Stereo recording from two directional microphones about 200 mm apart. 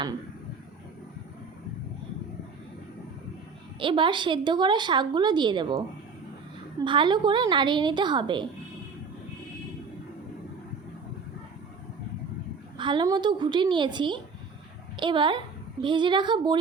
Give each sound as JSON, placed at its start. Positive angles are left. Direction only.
{"t": 3.8, "sound": "a woman's voice", "side_deg": -25}
{"t": 12.7, "sound": "a woman's voice", "side_deg": -25}